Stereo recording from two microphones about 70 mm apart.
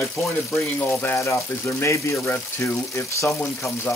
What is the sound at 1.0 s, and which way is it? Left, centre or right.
Speech, left.